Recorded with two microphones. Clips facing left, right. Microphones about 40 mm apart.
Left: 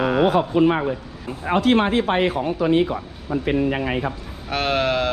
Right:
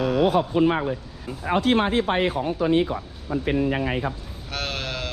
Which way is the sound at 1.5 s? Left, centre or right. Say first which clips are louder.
Left 3 dB; left.